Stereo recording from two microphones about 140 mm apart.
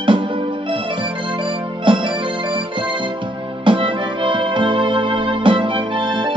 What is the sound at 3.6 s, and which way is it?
Music, 35° right (ahead or behind).